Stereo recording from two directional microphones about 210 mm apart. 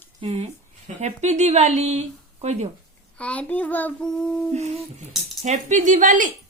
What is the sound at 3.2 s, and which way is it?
Child singing, 5° left (ahead or behind).